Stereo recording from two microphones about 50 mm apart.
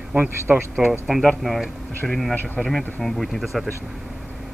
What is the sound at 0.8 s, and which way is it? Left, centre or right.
Speech, centre.